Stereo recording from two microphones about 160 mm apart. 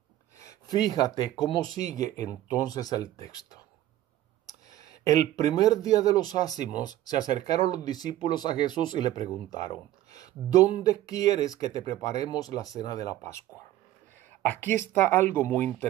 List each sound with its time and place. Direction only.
0.4 s speech: 20° left (ahead or behind)
14.4 s speech: 10° left (ahead or behind)